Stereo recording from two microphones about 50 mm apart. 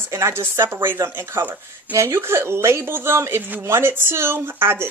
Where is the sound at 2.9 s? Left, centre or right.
Right.